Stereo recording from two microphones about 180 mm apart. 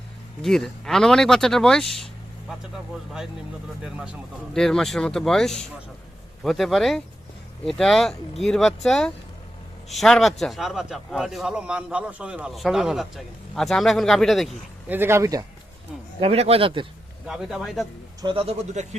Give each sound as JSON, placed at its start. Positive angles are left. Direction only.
{"t": 0.4, "sound": "a man's voice", "side_deg": 0}
{"t": 3.8, "sound": "a man's voice", "side_deg": -5}
{"t": 14.8, "sound": "speech", "side_deg": -10}
{"t": 16.2, "sound": "speech", "side_deg": -35}
{"t": 17.2, "sound": "a man's voice", "side_deg": 0}
{"t": 18.2, "sound": "speech", "side_deg": -30}